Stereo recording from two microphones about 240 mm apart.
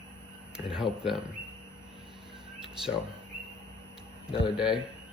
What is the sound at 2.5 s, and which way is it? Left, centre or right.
Speech, centre.